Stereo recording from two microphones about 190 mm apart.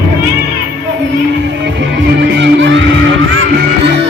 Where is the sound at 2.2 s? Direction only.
70° right (ahead or behind).